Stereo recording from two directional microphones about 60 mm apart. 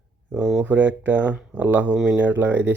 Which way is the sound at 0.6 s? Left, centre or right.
Right.